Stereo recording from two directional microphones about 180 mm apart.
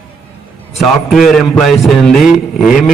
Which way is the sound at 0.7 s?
Centre (ahead or behind).